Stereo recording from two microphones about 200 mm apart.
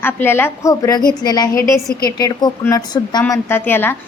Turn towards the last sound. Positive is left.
turn(degrees=10)  # may be behind; listen again after turning